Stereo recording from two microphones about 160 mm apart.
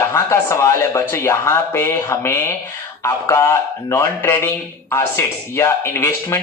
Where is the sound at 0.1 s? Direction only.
15° left (ahead or behind).